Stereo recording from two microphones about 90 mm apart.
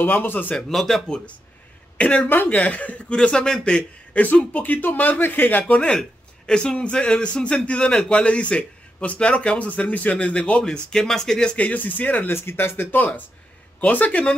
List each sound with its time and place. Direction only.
0.0 s speech: 20° left (ahead or behind)
0.6 s a man's voice: 5° left (ahead or behind)
5.9 s a man's voice: 5° left (ahead or behind)